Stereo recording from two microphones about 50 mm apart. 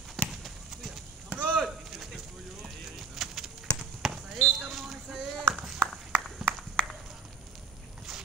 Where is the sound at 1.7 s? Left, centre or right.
Centre.